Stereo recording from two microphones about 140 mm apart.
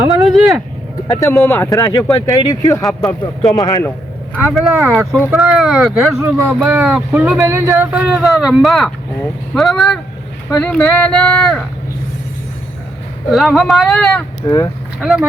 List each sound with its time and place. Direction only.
0.1 s vehicle: centre (ahead or behind)
1.0 s speech: 15° left (ahead or behind)
4.7 s speech: 20° right (ahead or behind)
5.3 s speech: 5° right (ahead or behind)
6.5 s speech: 15° right (ahead or behind)
7.3 s speech: 20° right (ahead or behind); by 11.6 s 10° left (ahead or behind)
13.3 s speech: centre (ahead or behind)
14.4 s speech: 25° left (ahead or behind)
15.0 s speech: 5° right (ahead or behind)